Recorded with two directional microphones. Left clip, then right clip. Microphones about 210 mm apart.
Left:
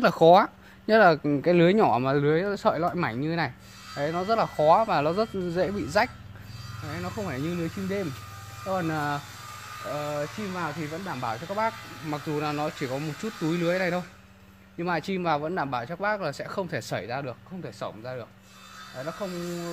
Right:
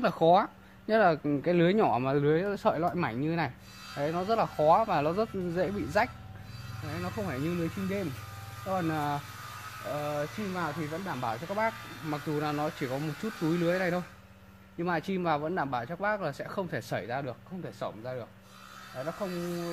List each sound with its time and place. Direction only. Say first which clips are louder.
0.0 s speech: left 6 dB; 45° left (ahead or behind); by 19.2 s 25° left (ahead or behind)